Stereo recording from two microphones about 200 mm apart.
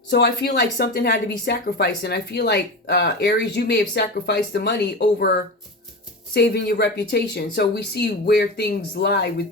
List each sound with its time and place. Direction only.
0.1 s a woman's voice: 55° left (ahead or behind)